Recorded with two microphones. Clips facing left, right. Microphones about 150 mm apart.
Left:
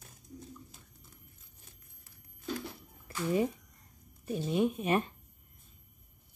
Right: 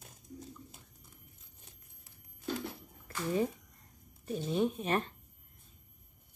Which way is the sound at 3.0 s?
10° left (ahead or behind).